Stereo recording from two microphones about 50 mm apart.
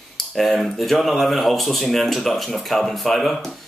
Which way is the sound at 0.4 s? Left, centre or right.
Centre.